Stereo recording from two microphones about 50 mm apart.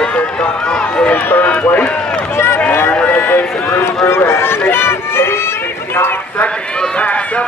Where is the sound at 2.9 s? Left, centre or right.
Left.